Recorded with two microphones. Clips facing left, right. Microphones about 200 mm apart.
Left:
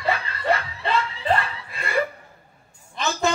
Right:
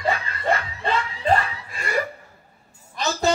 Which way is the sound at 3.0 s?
40° right (ahead or behind).